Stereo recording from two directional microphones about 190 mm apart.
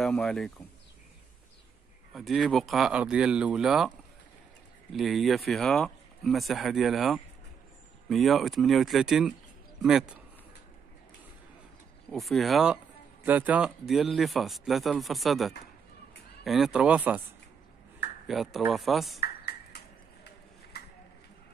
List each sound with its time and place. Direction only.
0.0 s speech: centre (ahead or behind)
2.1 s speech: centre (ahead or behind)
4.9 s a man's voice: centre (ahead or behind)
12.1 s speech: centre (ahead or behind)
18.2 s speech: centre (ahead or behind)
19.1 s ping: 55° left (ahead or behind)
20.7 s a sound: 60° left (ahead or behind)